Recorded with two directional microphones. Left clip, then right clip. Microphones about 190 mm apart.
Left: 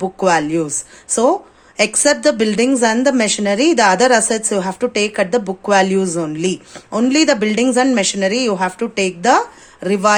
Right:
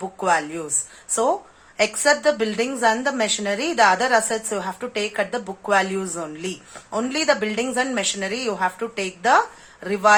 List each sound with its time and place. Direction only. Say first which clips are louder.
0.0 s a woman's voice: left 6 dB; 45° left (ahead or behind)
1.7 s a woman's voice: left 4 dB; 45° left (ahead or behind)